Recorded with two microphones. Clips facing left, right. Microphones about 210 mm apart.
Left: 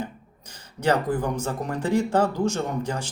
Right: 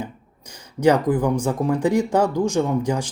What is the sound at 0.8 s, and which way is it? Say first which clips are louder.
Speech: right 6 dB; 10° right (ahead or behind).